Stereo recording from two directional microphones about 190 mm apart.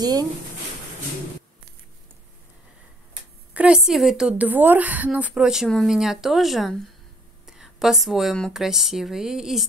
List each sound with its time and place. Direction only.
0.0 s speech: 20° right (ahead or behind)
3.5 s a woman's voice: 5° right (ahead or behind)